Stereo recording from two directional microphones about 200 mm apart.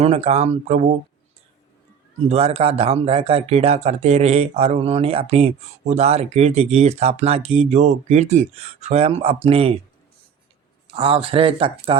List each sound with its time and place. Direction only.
0.0 s speech: 30° right (ahead or behind)
2.3 s speech: 30° right (ahead or behind)
10.9 s speech: 25° right (ahead or behind)